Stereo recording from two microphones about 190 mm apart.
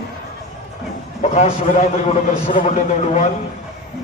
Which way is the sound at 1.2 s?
35° left (ahead or behind).